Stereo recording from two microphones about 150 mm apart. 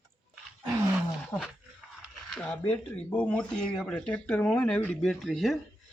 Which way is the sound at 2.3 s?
10° left (ahead or behind).